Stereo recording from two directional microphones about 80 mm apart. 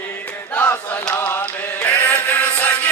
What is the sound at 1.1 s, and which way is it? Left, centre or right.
Music, left.